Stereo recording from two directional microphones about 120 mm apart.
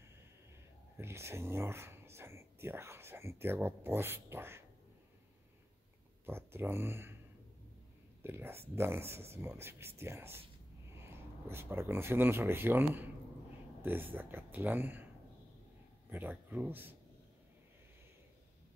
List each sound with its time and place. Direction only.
0.9 s speech: 20° right (ahead or behind)
6.2 s speech: 20° right (ahead or behind)
8.2 s speech: 20° right (ahead or behind)
16.1 s speech: 15° right (ahead or behind)